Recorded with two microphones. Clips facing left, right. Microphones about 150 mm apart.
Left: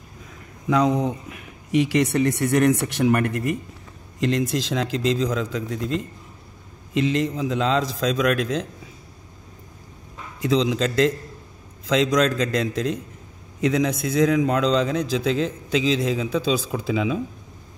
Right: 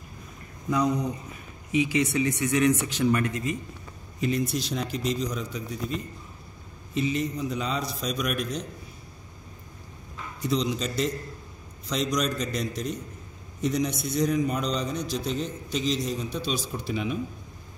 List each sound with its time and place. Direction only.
0.7 s a man's voice: 90° left; by 3.5 s 60° left (ahead or behind)
4.2 s a man's voice: 90° left
10.4 s a man's voice: 90° left